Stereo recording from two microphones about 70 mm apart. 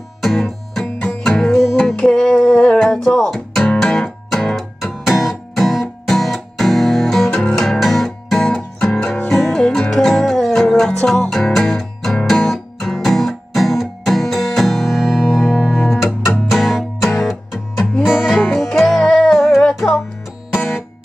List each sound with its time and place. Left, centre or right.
0.2 s music: centre
8.5 s music: centre
19.3 s music: centre
19.6 s music: centre